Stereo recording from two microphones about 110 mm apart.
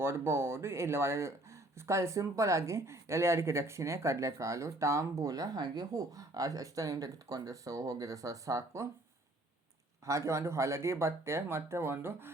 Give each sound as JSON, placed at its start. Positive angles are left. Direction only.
{"t": 0.0, "sound": "speech", "side_deg": -25}
{"t": 10.1, "sound": "speech", "side_deg": -25}